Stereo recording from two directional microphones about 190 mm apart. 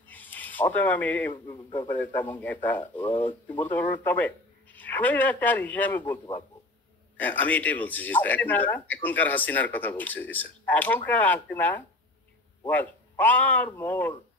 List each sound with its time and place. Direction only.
0.1 s a sound: 10° left (ahead or behind)
1.3 s a man's voice: 25° left (ahead or behind)
1.8 s a man's voice: 10° left (ahead or behind)
7.2 s a man's voice: 10° left (ahead or behind)